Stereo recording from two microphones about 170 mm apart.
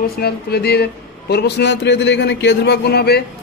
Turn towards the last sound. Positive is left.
turn(degrees=70)  # may be behind; listen again after turning